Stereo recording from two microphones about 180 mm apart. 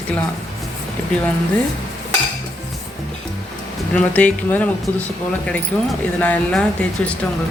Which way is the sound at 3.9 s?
5° left (ahead or behind).